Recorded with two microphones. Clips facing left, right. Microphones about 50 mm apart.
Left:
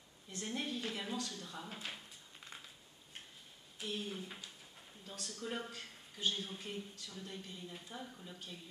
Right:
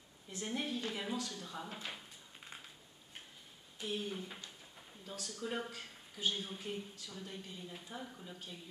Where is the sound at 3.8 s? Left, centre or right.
Centre.